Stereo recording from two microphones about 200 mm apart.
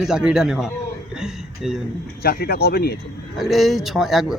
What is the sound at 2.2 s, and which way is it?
Speech, 50° left (ahead or behind).